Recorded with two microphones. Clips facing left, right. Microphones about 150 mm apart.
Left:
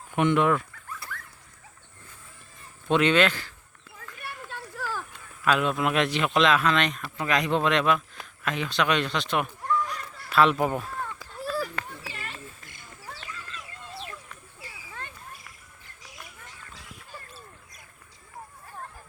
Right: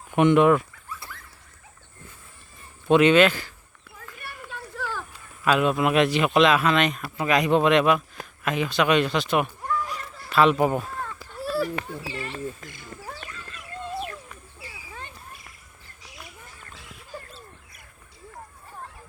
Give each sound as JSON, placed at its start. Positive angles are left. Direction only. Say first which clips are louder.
{"t": 0.2, "sound": "dog", "louder": "right 5 dB", "side_deg": -15}
{"t": 2.8, "sound": "speech", "louder": "right 5 dB", "side_deg": -10}
{"t": 5.5, "sound": "speech", "louder": "right 3 dB", "side_deg": -5}
{"t": 11.2, "sound": "a sound", "louder": "right 6 dB", "side_deg": -10}
{"t": 11.9, "sound": "speech", "louder": "right 7 dB", "side_deg": -30}
{"t": 13.9, "sound": "a sound", "louder": "right 7 dB", "side_deg": -50}